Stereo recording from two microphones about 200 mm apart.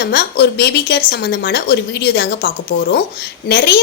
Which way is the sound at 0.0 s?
55° left (ahead or behind).